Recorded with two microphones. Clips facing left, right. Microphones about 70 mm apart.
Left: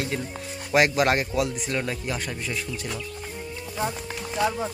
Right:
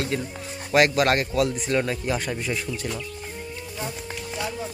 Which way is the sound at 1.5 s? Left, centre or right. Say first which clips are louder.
Right 4 dB; centre.